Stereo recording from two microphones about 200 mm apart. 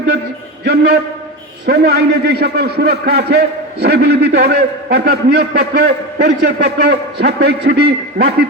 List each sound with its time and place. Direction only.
0.6 s a man's voice: 55° right (ahead or behind)